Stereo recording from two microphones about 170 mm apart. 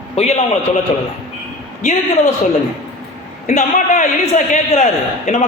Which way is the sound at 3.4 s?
45° left (ahead or behind).